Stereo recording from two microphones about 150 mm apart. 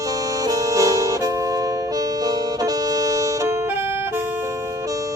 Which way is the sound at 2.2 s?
25° right (ahead or behind).